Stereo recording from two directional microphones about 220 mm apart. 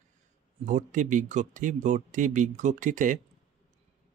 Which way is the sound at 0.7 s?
35° right (ahead or behind).